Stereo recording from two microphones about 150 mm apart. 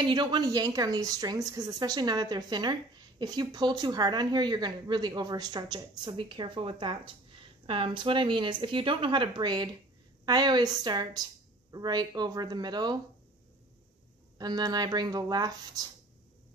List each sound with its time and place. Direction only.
0.0 s a woman's voice: 30° right (ahead or behind)
14.4 s a woman's voice: 25° right (ahead or behind)